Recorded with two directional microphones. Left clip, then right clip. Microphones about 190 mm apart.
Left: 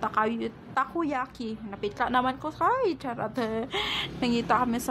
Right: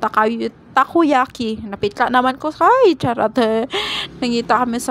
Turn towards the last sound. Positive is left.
turn(degrees=-30)  # may be behind; listen again after turning